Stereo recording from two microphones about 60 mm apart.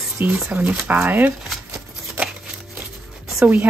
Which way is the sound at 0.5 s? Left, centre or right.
Right.